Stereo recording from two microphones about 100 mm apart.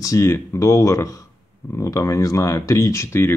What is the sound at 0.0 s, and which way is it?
Speech, 30° left (ahead or behind).